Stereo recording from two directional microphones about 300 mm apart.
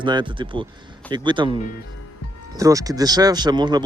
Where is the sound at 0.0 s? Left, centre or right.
Centre.